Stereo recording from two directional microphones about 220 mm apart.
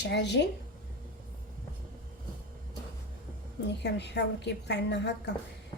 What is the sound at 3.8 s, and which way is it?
A woman's voice, 50° left (ahead or behind).